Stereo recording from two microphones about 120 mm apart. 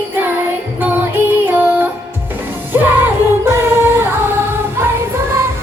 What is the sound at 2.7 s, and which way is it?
Music, 15° right (ahead or behind).